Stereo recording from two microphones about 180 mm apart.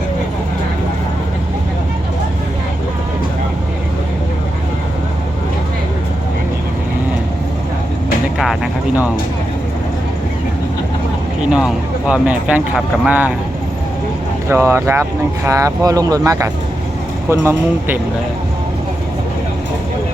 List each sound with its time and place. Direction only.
8.4 s vehicle: centre (ahead or behind)
11.5 s speech: 5° right (ahead or behind)
14.5 s speech: 15° right (ahead or behind)